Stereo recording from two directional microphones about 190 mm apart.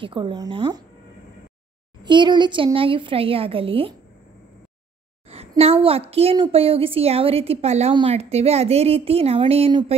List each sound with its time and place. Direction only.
0.0 s a woman's voice: 25° right (ahead or behind)
2.0 s a woman's voice: 25° right (ahead or behind)
5.6 s a woman's voice: 30° right (ahead or behind)